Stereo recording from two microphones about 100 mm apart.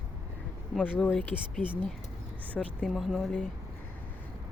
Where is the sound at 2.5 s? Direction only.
15° left (ahead or behind).